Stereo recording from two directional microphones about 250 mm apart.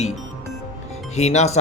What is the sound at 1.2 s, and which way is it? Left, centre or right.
Speech, left.